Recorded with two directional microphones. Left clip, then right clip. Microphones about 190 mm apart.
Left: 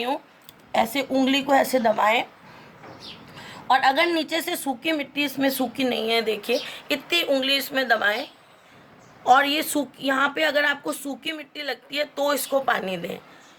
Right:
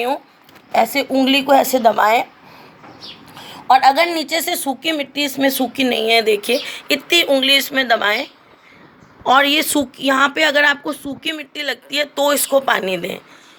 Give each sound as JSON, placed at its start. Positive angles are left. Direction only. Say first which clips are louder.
{"t": 0.7, "sound": "speech", "louder": "right 7 dB", "side_deg": -25}
{"t": 3.3, "sound": "speech", "louder": "right 8 dB", "side_deg": -25}